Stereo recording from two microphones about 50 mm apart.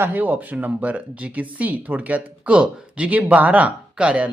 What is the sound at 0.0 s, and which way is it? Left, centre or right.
Speech, right.